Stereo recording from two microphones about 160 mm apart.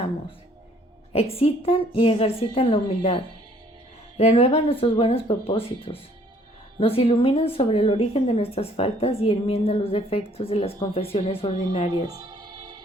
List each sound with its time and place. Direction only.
1.1 s a woman's voice: 40° left (ahead or behind)
4.2 s a woman's voice: 40° left (ahead or behind)